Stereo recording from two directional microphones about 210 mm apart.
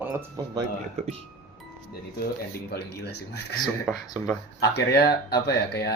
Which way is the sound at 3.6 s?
Centre (ahead or behind).